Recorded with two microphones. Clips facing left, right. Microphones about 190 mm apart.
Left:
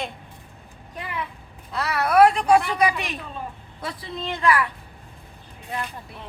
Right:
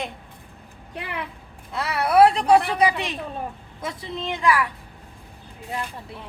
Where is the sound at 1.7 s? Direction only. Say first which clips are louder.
Even; 25° right (ahead or behind).